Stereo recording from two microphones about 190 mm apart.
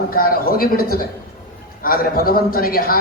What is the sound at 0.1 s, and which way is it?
A man's voice, 50° left (ahead or behind).